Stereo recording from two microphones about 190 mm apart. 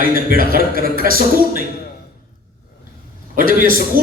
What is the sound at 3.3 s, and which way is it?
Speech, 45° right (ahead or behind).